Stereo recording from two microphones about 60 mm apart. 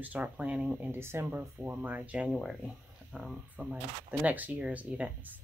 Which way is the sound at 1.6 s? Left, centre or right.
Right.